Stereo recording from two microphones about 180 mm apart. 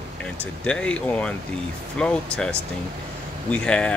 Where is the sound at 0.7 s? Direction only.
5° left (ahead or behind).